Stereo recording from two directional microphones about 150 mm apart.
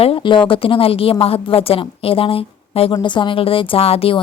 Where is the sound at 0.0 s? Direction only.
35° left (ahead or behind).